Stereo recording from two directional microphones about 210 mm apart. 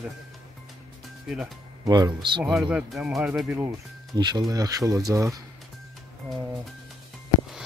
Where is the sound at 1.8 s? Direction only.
20° right (ahead or behind).